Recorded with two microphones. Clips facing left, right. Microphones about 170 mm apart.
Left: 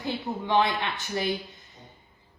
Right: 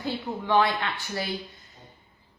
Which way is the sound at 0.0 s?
20° left (ahead or behind).